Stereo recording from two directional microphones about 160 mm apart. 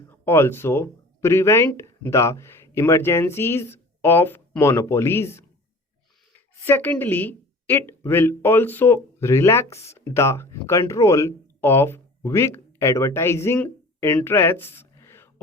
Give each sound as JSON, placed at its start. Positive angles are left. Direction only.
{"t": 0.1, "sound": "speech", "side_deg": 15}
{"t": 6.7, "sound": "a woman's voice", "side_deg": 10}